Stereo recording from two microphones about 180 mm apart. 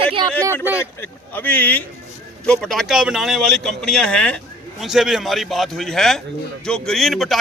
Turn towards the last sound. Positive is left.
turn(degrees=0)  # may be behind; listen again after turning